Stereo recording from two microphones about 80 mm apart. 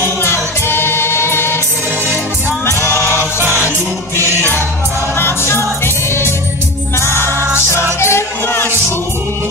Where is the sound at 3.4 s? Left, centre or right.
Right.